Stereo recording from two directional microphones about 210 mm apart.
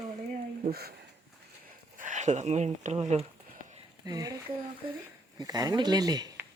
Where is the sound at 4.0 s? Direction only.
15° right (ahead or behind).